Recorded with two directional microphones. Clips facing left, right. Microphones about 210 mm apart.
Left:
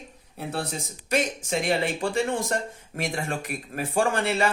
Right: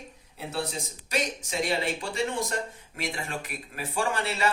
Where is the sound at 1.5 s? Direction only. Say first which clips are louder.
Left 3 dB; 50° left (ahead or behind).